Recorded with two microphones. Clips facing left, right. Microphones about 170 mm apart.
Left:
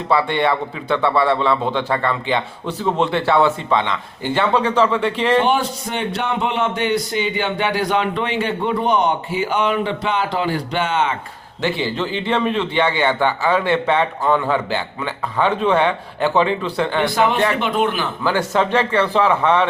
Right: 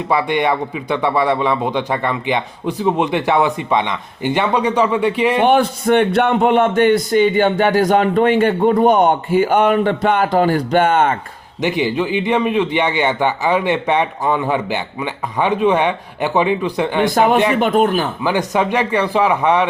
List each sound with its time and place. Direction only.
0.1 s a man's voice: 15° right (ahead or behind)
5.5 s a man's voice: 55° right (ahead or behind)
11.6 s a man's voice: 15° right (ahead or behind)
17.6 s a man's voice: 45° right (ahead or behind)
18.2 s a man's voice: 15° right (ahead or behind)